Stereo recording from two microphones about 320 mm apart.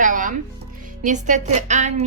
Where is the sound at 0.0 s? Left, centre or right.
Right.